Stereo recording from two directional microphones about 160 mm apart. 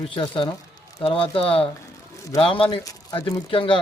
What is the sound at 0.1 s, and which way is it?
Speech, 30° left (ahead or behind).